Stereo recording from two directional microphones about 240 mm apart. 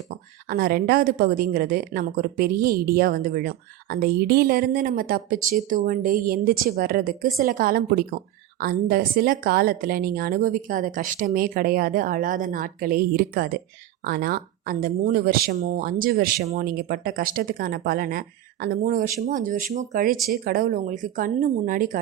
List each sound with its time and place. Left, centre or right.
0.4 s a woman's voice: right